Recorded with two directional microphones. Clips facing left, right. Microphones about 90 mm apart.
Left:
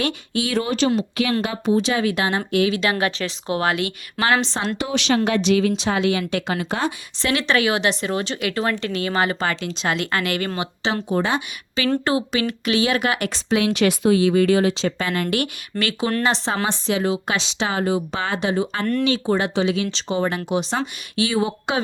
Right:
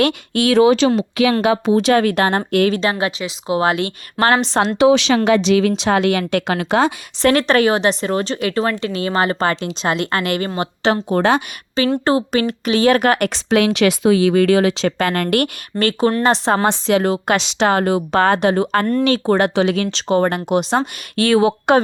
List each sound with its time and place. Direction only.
0.0 s a woman's voice: 80° right; by 2.8 s 55° right (ahead or behind)
2.8 s speech: 25° right (ahead or behind)
3.2 s speech: 10° right (ahead or behind)
3.5 s speech: 25° right (ahead or behind)
4.8 s speech: 90° right
7.2 s speech: 45° right (ahead or behind); by 10.6 s 30° right (ahead or behind)
11.1 s speech: 65° right (ahead or behind)
12.0 s speech: 40° right (ahead or behind); by 13.7 s 70° right (ahead or behind)
13.7 s speech: 90° right; by 15.4 s 55° right (ahead or behind)
15.8 s a woman's voice: 40° right (ahead or behind)
16.6 s speech: 70° right (ahead or behind)